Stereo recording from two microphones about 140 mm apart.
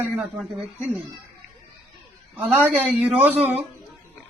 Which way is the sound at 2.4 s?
45° right (ahead or behind).